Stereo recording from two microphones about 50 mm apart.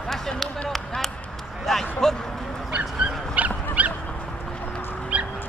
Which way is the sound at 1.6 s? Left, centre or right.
Centre.